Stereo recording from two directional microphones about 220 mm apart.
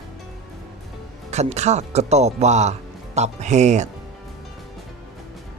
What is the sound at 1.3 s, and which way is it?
Speech, 30° right (ahead or behind).